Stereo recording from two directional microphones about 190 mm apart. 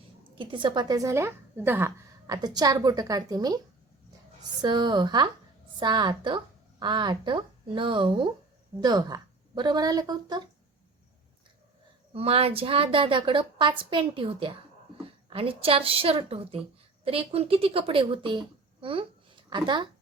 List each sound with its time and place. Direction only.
0.3 s a woman's voice: 25° right (ahead or behind)
4.6 s a woman's voice: 25° right (ahead or behind)
12.1 s a woman's voice: 30° right (ahead or behind)